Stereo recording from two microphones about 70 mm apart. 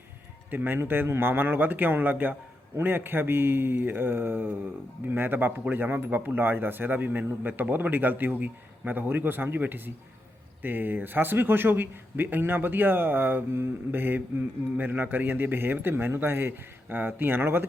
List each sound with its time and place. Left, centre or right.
0.5 s speech: right